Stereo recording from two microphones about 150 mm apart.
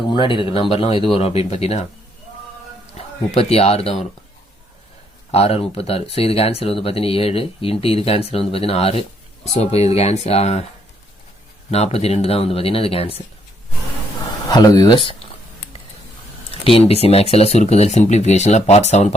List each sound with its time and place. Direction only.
0.1 s speech: 35° left (ahead or behind)
3.0 s speech: 45° left (ahead or behind)
5.3 s speech: 40° left (ahead or behind)
11.7 s speech: 45° left (ahead or behind)
14.4 s speech: 25° left (ahead or behind)
16.5 s speech: 40° left (ahead or behind)